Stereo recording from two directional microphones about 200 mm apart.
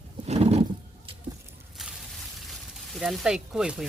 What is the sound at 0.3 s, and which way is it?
Roar, 30° right (ahead or behind).